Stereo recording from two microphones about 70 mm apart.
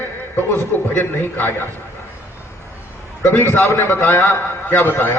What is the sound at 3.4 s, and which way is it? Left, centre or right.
A man's voice, left.